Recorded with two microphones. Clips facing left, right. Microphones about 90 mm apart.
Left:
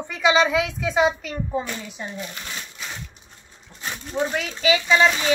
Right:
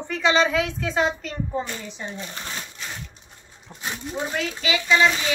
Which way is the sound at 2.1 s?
30° right (ahead or behind).